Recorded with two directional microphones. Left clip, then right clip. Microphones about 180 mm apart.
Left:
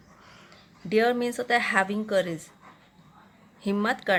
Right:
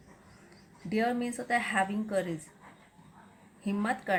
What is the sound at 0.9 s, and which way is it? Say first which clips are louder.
Speech: left 8 dB; 35° left (ahead or behind).